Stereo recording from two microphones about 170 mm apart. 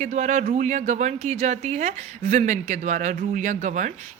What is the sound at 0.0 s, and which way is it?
Speech, 45° right (ahead or behind).